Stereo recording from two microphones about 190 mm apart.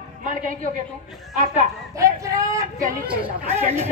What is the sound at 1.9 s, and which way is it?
Speech, 15° right (ahead or behind).